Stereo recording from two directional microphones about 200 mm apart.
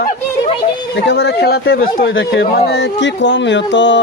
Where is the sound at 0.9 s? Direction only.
60° left (ahead or behind).